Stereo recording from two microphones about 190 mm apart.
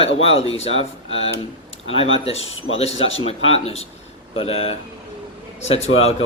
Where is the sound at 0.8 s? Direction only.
30° left (ahead or behind).